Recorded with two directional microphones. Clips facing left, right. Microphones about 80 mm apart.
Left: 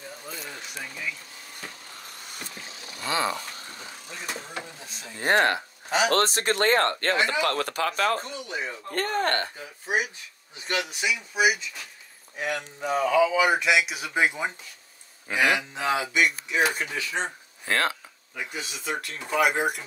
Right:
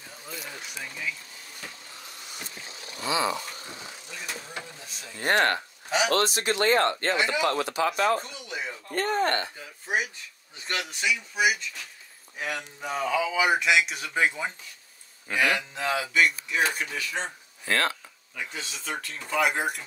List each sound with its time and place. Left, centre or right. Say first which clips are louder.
0.3 s a sound: right 1 dB; centre
3.1 s speech: even; left
4.3 s vehicle: left 3 dB; left
5.2 s speech: left 2 dB; centre
5.9 s speech: left 2 dB; left
10.7 s speech: left 1 dB; centre